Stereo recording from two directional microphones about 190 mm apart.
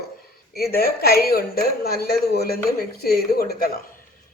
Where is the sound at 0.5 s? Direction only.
55° left (ahead or behind).